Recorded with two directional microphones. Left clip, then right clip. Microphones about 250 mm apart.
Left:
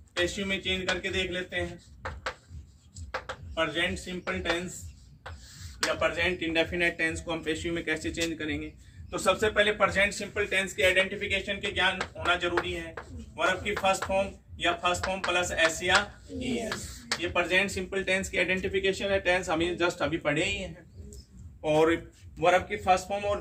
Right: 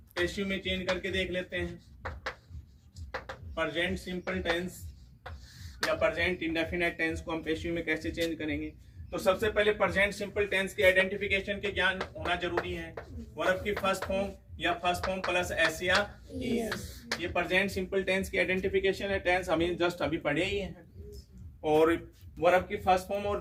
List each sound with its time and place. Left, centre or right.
0.1 s speech: centre
3.1 s speech: centre
5.8 s a man's voice: centre